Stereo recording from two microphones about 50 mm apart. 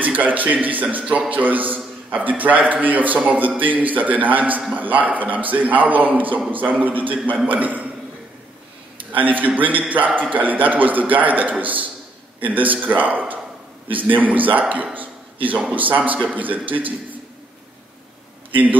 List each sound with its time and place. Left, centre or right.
0.0 s a man's voice: right
9.2 s a man's voice: right
15.0 s a sound: right
15.7 s a man's voice: right